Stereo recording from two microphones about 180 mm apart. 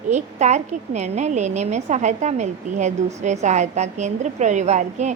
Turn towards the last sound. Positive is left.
turn(degrees=-40)  # may be behind; listen again after turning